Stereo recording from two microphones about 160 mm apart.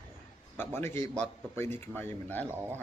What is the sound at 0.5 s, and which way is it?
A man's voice, 15° left (ahead or behind).